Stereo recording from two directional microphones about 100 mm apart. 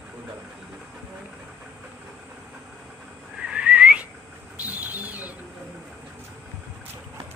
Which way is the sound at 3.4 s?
10° right (ahead or behind).